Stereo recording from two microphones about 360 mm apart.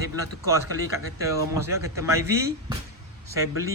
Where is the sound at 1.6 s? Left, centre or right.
Centre.